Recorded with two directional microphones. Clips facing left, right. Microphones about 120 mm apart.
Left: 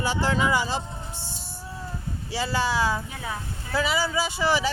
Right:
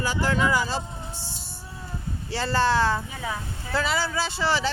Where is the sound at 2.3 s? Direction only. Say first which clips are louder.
Right 3 dB; 10° left (ahead or behind).